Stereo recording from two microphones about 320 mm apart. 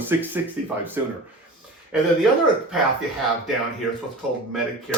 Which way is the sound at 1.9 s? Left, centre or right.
Centre.